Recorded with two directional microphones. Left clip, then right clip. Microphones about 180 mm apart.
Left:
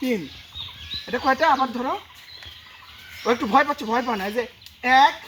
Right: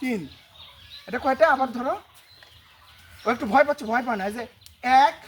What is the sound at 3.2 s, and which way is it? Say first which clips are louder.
Speech: left 1 dB; 35° right (ahead or behind).